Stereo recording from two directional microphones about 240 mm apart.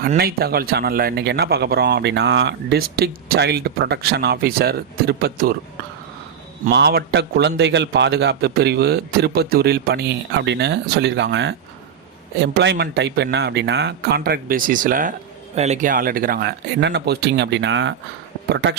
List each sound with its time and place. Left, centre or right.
0.0 s speech: right
6.7 s a man's voice: right